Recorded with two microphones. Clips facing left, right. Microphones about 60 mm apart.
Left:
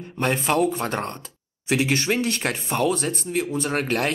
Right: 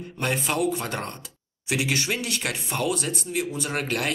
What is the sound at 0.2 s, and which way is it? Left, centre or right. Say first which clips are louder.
Speech: left 4 dB; left.